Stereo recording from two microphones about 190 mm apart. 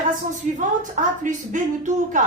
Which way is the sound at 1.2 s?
40° right (ahead or behind).